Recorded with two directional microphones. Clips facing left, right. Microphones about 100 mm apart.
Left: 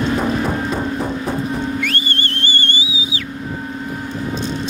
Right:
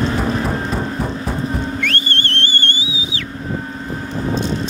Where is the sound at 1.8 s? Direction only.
10° left (ahead or behind).